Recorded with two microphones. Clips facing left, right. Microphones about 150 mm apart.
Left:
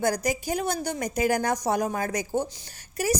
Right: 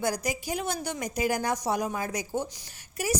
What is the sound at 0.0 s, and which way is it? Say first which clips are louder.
A woman's voice: left 4 dB; 45° left (ahead or behind).